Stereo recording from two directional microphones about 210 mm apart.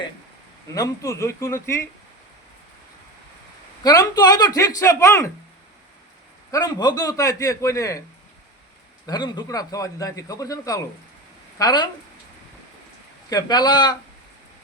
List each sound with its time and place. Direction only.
0.7 s a man's voice: 15° left (ahead or behind)
3.8 s a man's voice: 20° left (ahead or behind)
6.5 s a man's voice: 15° left (ahead or behind)
9.0 s a man's voice: 20° left (ahead or behind)
13.3 s speech: 20° left (ahead or behind)